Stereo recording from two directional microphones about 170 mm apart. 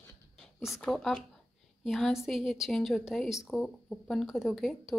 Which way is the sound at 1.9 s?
Centre (ahead or behind).